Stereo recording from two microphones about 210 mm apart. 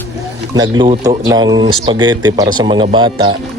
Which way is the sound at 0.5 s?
20° right (ahead or behind).